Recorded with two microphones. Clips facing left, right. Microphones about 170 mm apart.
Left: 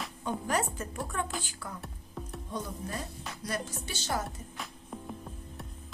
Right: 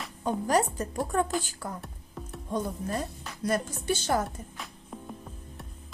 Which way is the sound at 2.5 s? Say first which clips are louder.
Right 7 dB; 50° right (ahead or behind).